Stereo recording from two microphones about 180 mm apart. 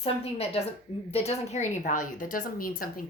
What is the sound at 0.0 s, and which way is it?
A woman's voice, 35° left (ahead or behind).